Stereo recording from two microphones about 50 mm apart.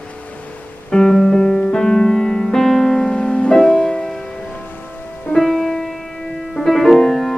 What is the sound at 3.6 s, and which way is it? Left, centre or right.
Music, centre.